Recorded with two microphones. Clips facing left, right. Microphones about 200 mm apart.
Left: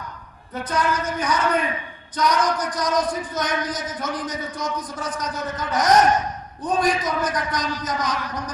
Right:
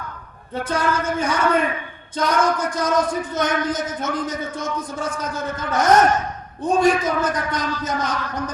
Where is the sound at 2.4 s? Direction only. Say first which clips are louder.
Right 3 dB; 25° right (ahead or behind).